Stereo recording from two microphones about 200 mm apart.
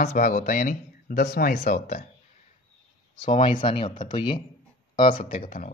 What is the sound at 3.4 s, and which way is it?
Speech, 25° left (ahead or behind).